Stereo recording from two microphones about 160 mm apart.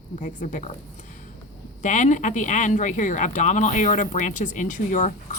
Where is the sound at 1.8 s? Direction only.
50° left (ahead or behind).